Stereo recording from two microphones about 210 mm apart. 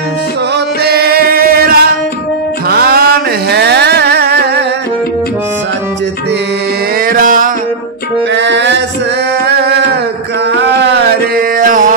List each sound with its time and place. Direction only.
0.8 s music: 50° right (ahead or behind)
7.1 s music: 40° right (ahead or behind)
8.4 s music: 55° right (ahead or behind)
11.3 s mantra: 40° right (ahead or behind)